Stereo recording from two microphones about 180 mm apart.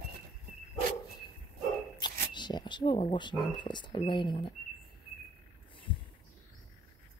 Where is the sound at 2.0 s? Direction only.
25° left (ahead or behind).